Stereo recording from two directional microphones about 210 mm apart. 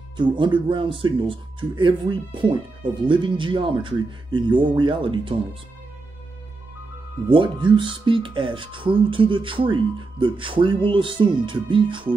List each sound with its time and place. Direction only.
0.2 s speech: 20° right (ahead or behind)
7.2 s speech: 25° right (ahead or behind)